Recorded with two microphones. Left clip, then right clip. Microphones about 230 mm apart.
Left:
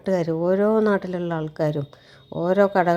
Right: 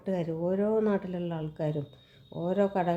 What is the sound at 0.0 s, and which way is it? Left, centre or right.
Speech, left.